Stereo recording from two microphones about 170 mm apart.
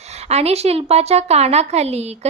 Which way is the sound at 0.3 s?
40° right (ahead or behind).